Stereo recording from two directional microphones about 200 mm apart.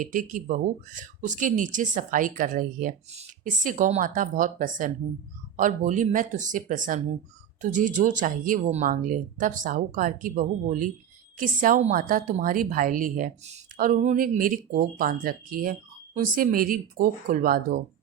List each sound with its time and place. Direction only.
0.0 s a woman's voice: 40° right (ahead or behind)